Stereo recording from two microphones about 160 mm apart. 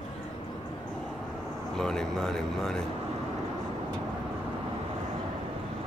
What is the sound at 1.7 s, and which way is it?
Speech, 5° left (ahead or behind).